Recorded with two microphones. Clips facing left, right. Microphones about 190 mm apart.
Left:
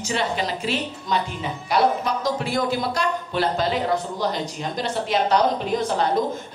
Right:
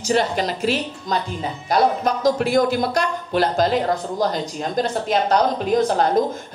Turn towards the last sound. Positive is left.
turn(degrees=-45)  # may be behind; listen again after turning